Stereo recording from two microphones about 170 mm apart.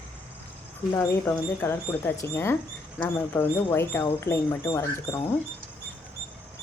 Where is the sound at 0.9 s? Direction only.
15° left (ahead or behind).